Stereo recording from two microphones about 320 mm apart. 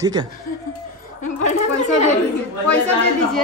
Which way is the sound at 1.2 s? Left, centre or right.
Left.